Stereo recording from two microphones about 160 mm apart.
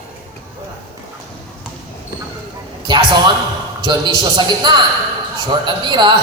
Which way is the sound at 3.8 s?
30° right (ahead or behind).